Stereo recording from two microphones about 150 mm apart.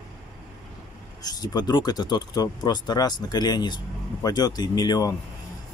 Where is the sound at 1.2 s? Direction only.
25° left (ahead or behind).